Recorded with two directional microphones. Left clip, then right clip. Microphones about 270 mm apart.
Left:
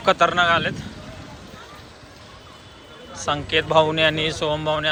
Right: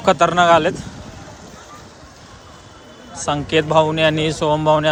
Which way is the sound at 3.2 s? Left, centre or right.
Centre.